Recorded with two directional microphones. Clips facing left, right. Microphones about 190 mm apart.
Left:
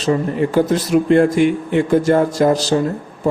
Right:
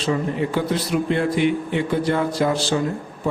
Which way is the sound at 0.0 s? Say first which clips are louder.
Left 5 dB; 45° left (ahead or behind).